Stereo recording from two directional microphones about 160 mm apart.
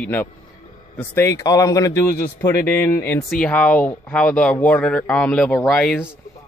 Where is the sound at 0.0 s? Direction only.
10° left (ahead or behind).